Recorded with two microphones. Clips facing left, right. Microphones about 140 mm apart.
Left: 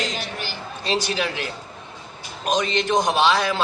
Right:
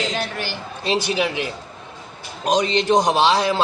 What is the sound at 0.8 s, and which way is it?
Speech, 20° right (ahead or behind).